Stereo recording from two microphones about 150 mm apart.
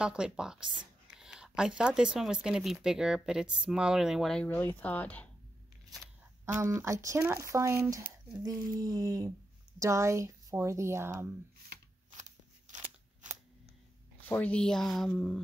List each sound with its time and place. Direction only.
0.0 s speech: 5° right (ahead or behind)
1.1 s a sound: 5° right (ahead or behind)
1.8 s speech: 5° right (ahead or behind)
4.5 s speech: 10° left (ahead or behind)
6.4 s speech: 20° right (ahead or behind)
12.2 s scissors: 55° right (ahead or behind)
14.2 s speech: 10° left (ahead or behind)